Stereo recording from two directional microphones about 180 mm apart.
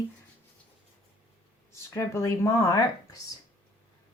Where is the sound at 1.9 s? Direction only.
15° left (ahead or behind).